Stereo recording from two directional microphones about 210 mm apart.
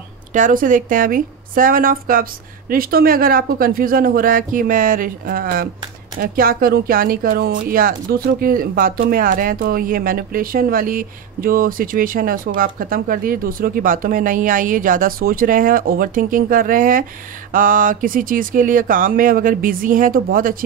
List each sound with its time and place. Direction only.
0.3 s speech: 40° right (ahead or behind)